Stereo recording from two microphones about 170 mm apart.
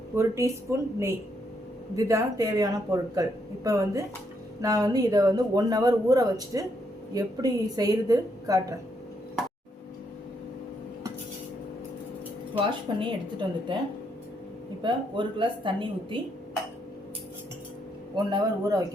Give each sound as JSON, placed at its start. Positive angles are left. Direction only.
{"t": 0.2, "sound": "speech", "side_deg": -15}
{"t": 12.5, "sound": "speech", "side_deg": -30}
{"t": 14.8, "sound": "speech", "side_deg": -25}
{"t": 18.3, "sound": "speech", "side_deg": -25}